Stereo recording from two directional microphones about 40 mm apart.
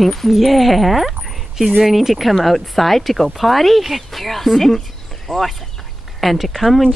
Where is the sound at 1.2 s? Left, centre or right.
Centre.